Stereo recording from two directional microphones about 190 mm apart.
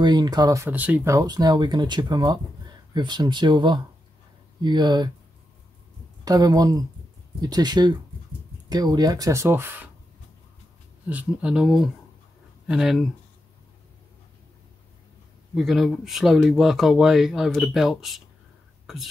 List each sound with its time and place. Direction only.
0.0 s speech: 20° right (ahead or behind)
6.2 s speech: 20° right (ahead or behind)
11.1 s speech: 5° right (ahead or behind)
15.5 s speech: centre (ahead or behind)